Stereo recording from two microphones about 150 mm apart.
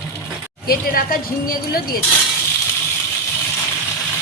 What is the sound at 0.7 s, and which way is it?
Speech, 70° left (ahead or behind).